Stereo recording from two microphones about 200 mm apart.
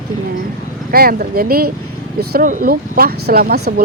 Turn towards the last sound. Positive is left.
turn(degrees=-50)  # may be behind; listen again after turning